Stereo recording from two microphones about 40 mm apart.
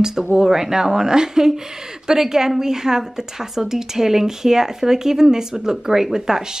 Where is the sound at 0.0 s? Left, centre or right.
Centre.